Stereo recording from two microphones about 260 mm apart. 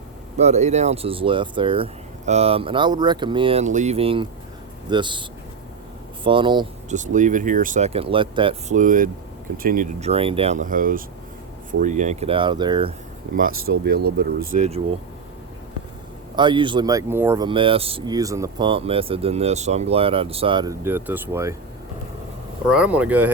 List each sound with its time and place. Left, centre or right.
0.3 s speech: right
6.2 s speech: centre
6.9 s speech: right
13.7 s speech: right
16.3 s speech: centre
22.7 s speech: centre